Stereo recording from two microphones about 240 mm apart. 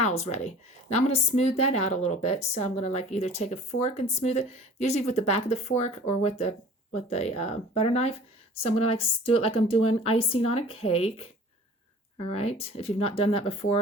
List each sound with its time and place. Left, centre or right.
0.0 s a woman's voice: left